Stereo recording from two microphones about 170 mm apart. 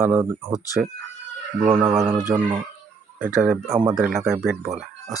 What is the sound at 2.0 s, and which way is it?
Speech, 15° right (ahead or behind).